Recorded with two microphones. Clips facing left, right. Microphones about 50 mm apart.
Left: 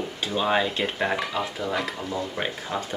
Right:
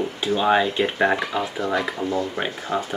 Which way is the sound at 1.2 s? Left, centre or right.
Centre.